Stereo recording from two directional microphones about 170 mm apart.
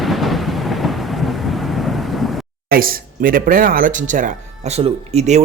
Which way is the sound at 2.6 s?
60° right (ahead or behind).